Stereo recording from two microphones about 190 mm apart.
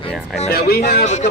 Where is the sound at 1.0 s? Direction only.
40° left (ahead or behind).